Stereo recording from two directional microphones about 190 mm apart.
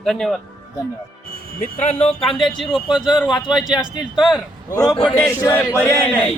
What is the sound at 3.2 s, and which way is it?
Speech, 25° left (ahead or behind).